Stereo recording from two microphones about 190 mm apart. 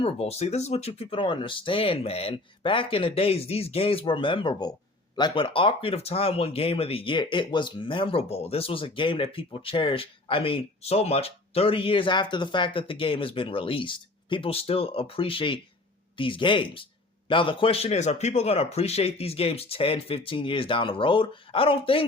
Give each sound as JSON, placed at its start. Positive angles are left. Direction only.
{"t": 0.0, "sound": "a man's voice", "side_deg": 30}